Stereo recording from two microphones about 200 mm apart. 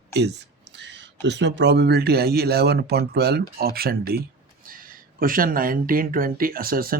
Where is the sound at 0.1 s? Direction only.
55° right (ahead or behind).